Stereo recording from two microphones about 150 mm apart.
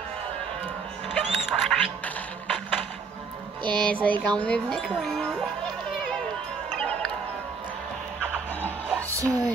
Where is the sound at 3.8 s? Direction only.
10° left (ahead or behind).